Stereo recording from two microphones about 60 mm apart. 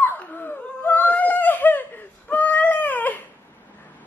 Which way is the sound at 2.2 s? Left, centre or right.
Left.